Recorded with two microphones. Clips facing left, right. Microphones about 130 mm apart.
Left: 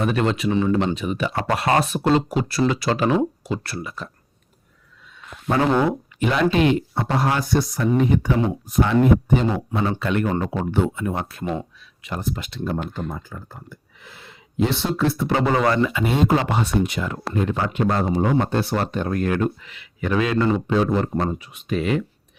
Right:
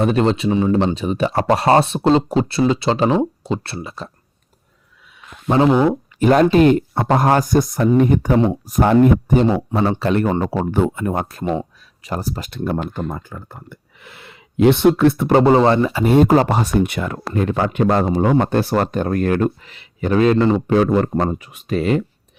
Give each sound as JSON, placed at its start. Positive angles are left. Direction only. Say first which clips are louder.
{"t": 0.0, "sound": "speech", "louder": "right 5 dB", "side_deg": -30}
{"t": 6.1, "sound": "speech", "louder": "right 7 dB", "side_deg": -45}
{"t": 9.5, "sound": "speech", "louder": "right 5 dB", "side_deg": -35}
{"t": 15.3, "sound": "speech", "louder": "right 7 dB", "side_deg": -35}
{"t": 16.1, "sound": "speech", "louder": "right 8 dB", "side_deg": -45}
{"t": 16.8, "sound": "speech", "louder": "right 3 dB", "side_deg": -60}
{"t": 17.8, "sound": "speech", "louder": "right 4 dB", "side_deg": -70}
{"t": 20.7, "sound": "speech", "louder": "right 5 dB", "side_deg": -55}